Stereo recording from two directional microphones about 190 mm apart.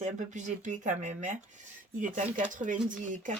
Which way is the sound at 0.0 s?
40° right (ahead or behind).